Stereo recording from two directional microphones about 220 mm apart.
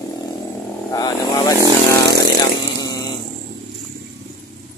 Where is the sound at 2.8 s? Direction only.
15° left (ahead or behind).